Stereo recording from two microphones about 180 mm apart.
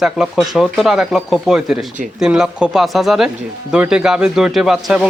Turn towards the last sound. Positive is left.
turn(degrees=-5)  # may be behind; listen again after turning